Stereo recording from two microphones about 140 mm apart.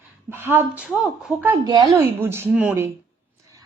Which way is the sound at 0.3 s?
15° right (ahead or behind).